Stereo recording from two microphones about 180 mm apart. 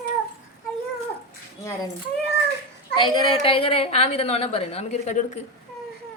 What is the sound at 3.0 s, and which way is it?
A woman's voice, 30° left (ahead or behind).